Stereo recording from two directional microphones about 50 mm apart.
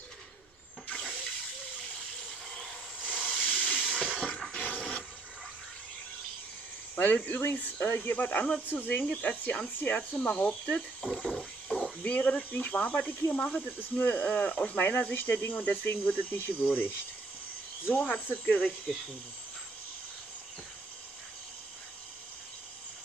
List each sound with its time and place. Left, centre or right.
3.2 s hiss: left
3.5 s hiss: centre
3.9 s a sound: left
4.5 s toilet flush: left
7.0 s speech: left
10.5 s speech: centre
11.2 s a sound: centre
12.0 s speech: left